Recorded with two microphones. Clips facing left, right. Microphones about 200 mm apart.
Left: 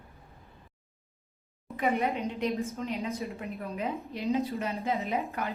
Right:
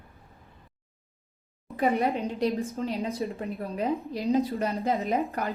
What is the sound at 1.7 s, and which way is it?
A woman's voice, 35° right (ahead or behind).